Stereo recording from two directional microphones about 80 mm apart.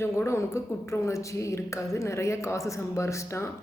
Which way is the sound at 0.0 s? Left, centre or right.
Left.